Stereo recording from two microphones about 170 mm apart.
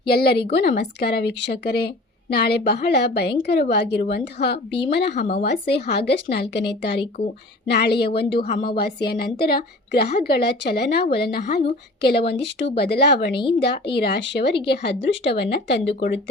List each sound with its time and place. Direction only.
0.1 s a woman's voice: 70° left (ahead or behind)
12.3 s a woman's voice: 85° left
13.3 s speech: 30° left (ahead or behind)
13.9 s a woman's voice: 75° left (ahead or behind); by 16.3 s 90° left